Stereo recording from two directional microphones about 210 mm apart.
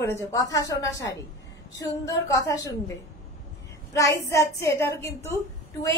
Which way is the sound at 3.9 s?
15° left (ahead or behind).